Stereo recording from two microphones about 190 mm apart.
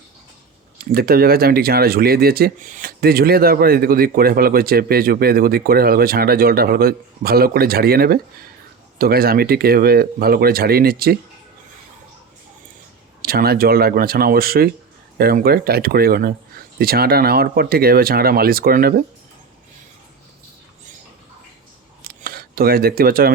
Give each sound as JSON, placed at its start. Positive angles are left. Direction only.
{"t": 0.9, "sound": "speech", "side_deg": -50}
{"t": 13.2, "sound": "speech", "side_deg": -55}
{"t": 22.0, "sound": "a sound", "side_deg": -50}